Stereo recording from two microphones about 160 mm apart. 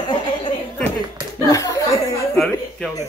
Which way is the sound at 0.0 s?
30° left (ahead or behind).